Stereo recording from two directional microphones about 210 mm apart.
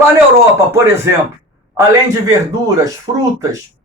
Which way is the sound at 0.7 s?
10° right (ahead or behind).